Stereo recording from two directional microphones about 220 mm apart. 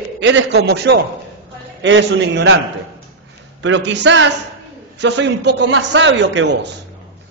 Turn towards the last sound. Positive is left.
turn(degrees=-55)  # may be behind; listen again after turning